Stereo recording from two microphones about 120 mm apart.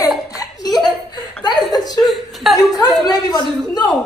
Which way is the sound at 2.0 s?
Centre (ahead or behind).